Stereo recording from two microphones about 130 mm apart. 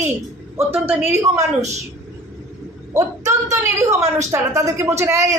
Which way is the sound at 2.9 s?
25° right (ahead or behind).